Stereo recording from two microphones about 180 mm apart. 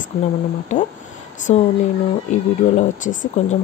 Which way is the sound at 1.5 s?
35° left (ahead or behind).